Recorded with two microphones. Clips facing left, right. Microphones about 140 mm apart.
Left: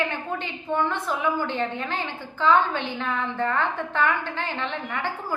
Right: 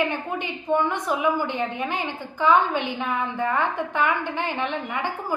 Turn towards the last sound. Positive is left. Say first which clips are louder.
# right 2 dB
turn(degrees=-15)  # may be behind; listen again after turning